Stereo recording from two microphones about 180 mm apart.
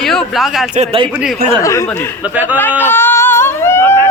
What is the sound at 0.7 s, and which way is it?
Speech, 35° right (ahead or behind).